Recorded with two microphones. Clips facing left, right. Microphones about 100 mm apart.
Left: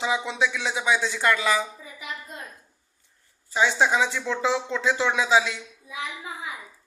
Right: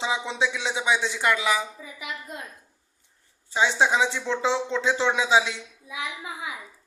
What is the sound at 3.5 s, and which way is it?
Speech, 20° right (ahead or behind).